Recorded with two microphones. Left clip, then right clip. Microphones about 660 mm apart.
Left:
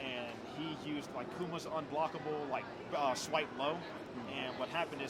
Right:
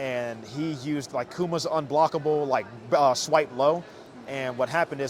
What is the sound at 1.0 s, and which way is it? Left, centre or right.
A man's voice, right.